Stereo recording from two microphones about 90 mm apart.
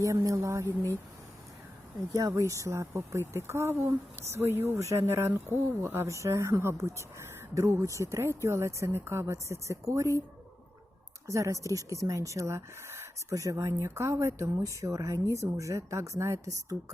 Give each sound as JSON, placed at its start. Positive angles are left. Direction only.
{"t": 0.0, "sound": "speech", "side_deg": -35}
{"t": 0.6, "sound": "speech", "side_deg": 25}
{"t": 2.1, "sound": "speech", "side_deg": -40}
{"t": 11.3, "sound": "speech", "side_deg": -35}